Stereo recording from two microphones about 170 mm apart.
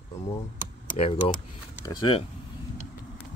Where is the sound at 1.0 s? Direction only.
35° left (ahead or behind).